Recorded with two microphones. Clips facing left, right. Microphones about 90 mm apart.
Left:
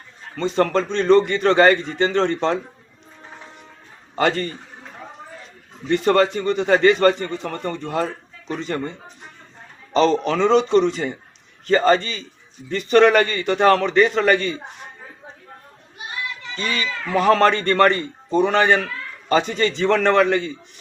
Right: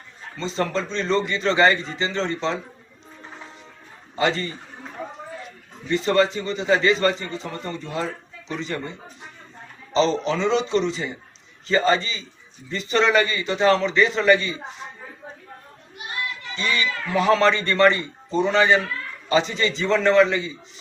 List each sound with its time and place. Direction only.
0.3 s a man's voice: 55° left (ahead or behind)
4.1 s a man's voice: 50° left (ahead or behind)
5.9 s a man's voice: 55° left (ahead or behind)
16.6 s a man's voice: 45° left (ahead or behind)